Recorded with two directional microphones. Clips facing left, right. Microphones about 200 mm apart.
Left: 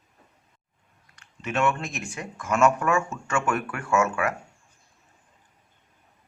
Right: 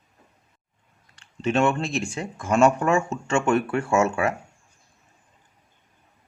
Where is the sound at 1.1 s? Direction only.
30° right (ahead or behind).